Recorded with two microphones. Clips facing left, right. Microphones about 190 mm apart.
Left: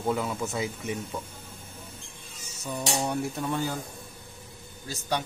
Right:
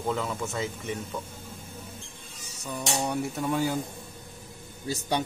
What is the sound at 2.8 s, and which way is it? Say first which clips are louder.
Speech: even; centre (ahead or behind).